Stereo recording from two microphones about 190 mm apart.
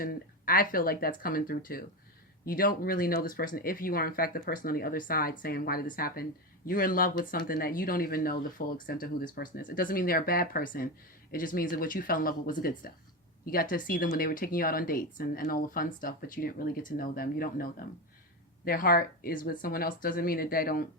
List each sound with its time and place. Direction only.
0.0 s speech: 50° left (ahead or behind)